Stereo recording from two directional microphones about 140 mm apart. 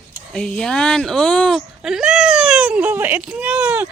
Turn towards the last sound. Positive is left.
turn(degrees=-5)  # may be behind; listen again after turning